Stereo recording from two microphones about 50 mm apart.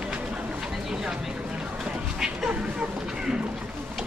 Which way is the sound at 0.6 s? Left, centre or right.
Centre.